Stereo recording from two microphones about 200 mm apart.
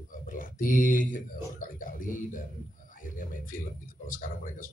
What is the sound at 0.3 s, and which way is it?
Speech, 45° left (ahead or behind).